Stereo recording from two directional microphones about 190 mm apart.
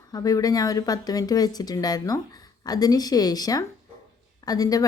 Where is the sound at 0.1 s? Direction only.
20° left (ahead or behind).